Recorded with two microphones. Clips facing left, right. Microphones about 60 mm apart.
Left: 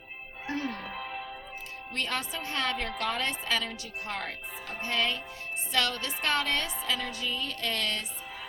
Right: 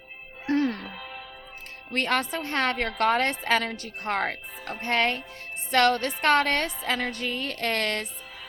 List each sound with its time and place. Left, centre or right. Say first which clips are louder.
0.5 s music: right 9 dB; right
0.9 s music: left 2 dB; centre
1.9 s a woman's voice: right 7 dB; right